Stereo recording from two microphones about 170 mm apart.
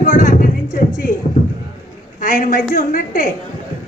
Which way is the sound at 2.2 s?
55° left (ahead or behind).